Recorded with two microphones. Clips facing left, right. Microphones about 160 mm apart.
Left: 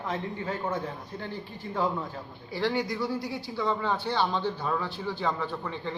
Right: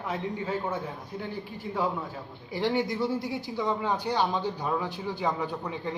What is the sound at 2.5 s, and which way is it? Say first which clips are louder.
Speech: right 1 dB; 20° right (ahead or behind).